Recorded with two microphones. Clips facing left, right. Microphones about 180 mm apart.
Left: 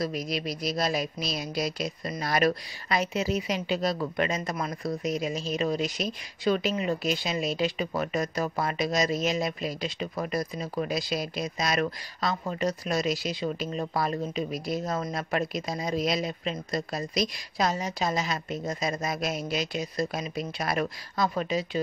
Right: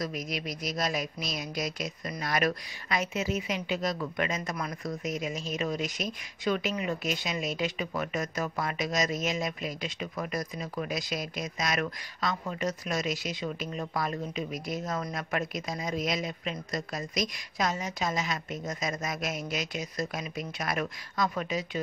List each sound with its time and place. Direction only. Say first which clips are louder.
0.0 s speech: left 4 dB; 30° left (ahead or behind)